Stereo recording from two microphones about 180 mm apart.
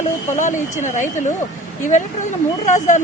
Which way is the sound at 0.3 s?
45° left (ahead or behind).